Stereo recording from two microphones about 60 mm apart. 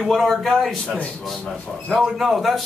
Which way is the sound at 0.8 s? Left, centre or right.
Centre.